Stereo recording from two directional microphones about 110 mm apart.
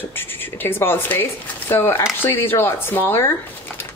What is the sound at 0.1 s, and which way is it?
Speech, 20° left (ahead or behind).